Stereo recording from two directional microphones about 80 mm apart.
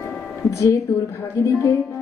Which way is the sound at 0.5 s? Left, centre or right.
Left.